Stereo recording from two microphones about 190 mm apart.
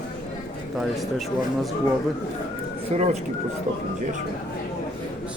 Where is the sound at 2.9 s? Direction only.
35° right (ahead or behind).